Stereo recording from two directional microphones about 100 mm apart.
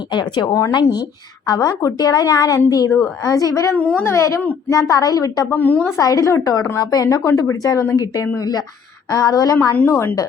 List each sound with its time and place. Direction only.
0.1 s speech: 50° left (ahead or behind)
0.4 s a woman's voice: 30° left (ahead or behind)
0.7 s a woman's voice: 45° left (ahead or behind)
3.8 s a woman's voice: 15° left (ahead or behind)
4.1 s a woman's voice: 30° left (ahead or behind)
5.5 s a woman's voice: 15° left (ahead or behind)
6.0 s a woman's voice: 35° left (ahead or behind)
9.7 s a woman's voice: 25° left (ahead or behind)